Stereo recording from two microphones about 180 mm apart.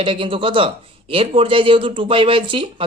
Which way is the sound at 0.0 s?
30° right (ahead or behind).